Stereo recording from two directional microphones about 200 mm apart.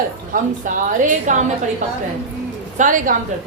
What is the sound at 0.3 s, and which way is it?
A woman's voice, 40° right (ahead or behind).